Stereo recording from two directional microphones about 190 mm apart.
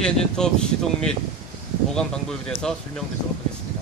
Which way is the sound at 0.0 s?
5° left (ahead or behind).